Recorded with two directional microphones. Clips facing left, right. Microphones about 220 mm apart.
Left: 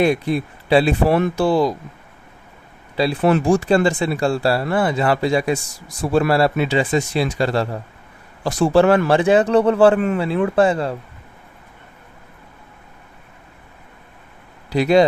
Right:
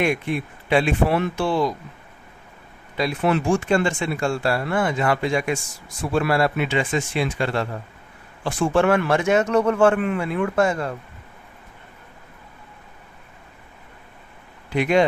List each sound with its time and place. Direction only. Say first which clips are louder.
0.0 s speech: left 5 dB; 35° left (ahead or behind)
2.9 s speech: left 4 dB; 35° left (ahead or behind)
14.7 s speech: left 4 dB; 35° left (ahead or behind)